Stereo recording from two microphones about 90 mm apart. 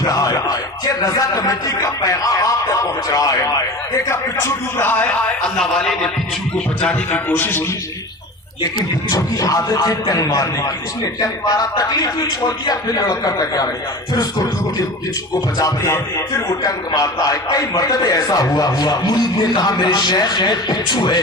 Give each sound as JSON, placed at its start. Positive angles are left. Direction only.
{"t": 0.0, "sound": "a sound", "side_deg": 40}
{"t": 1.0, "sound": "a man's voice", "side_deg": 40}
{"t": 5.5, "sound": "a man's voice", "side_deg": 5}
{"t": 6.8, "sound": "a man's voice", "side_deg": 20}
{"t": 9.0, "sound": "a man's voice", "side_deg": 40}
{"t": 15.5, "sound": "a man's voice", "side_deg": 35}
{"t": 16.6, "sound": "a man's voice", "side_deg": 45}